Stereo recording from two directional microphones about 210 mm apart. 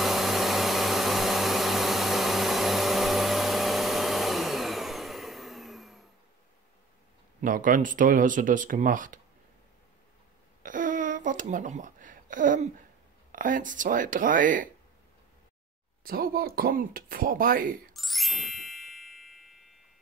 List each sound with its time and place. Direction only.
0.0 s vacuum cleaner: centre (ahead or behind)
7.4 s speech: 40° right (ahead or behind)
10.6 s a sound: 40° right (ahead or behind)
13.3 s speech: 40° right (ahead or behind)
16.0 s speech: 45° right (ahead or behind)
17.9 s ding: centre (ahead or behind)